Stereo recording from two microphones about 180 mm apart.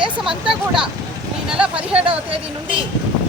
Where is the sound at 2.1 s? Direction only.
30° right (ahead or behind).